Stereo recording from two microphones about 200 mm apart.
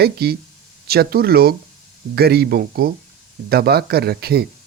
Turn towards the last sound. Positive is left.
turn(degrees=-50)  # may be behind; listen again after turning